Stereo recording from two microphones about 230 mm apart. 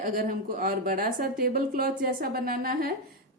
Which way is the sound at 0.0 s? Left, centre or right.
Right.